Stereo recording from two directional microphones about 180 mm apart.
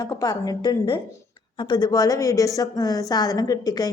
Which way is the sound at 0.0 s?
20° left (ahead or behind).